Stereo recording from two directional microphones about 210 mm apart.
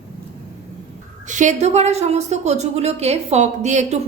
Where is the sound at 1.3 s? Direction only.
35° right (ahead or behind).